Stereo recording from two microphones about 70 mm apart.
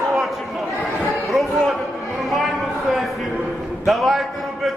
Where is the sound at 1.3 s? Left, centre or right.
Centre.